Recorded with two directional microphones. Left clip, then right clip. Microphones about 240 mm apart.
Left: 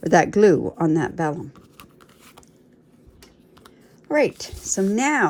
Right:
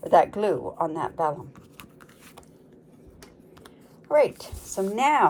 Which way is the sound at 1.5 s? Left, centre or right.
Centre.